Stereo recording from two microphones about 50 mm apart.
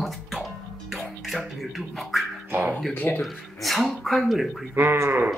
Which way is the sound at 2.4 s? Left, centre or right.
Right.